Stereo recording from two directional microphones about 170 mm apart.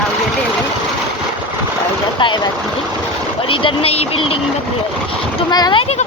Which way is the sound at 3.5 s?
35° left (ahead or behind).